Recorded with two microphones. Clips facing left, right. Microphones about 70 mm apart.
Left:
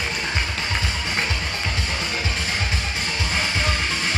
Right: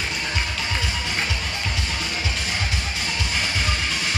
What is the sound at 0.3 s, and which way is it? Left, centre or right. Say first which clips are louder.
Music: left 1 dB; left.